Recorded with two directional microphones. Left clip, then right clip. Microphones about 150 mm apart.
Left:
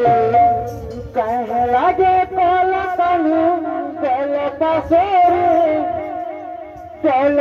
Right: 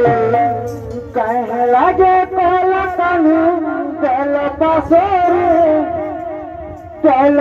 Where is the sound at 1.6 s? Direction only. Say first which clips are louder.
Right 4 dB; 35° right (ahead or behind).